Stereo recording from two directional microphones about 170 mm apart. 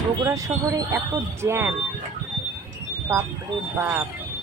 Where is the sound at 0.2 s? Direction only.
20° right (ahead or behind).